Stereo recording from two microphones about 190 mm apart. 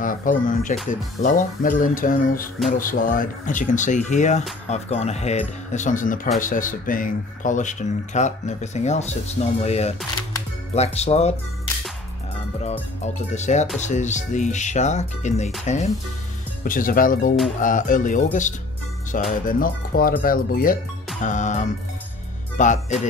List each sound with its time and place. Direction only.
0.0 s speech: 45° left (ahead or behind)
12.6 s speech: 35° left (ahead or behind)